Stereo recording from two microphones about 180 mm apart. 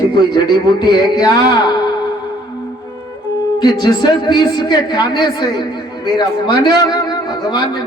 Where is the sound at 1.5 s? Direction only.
25° left (ahead or behind).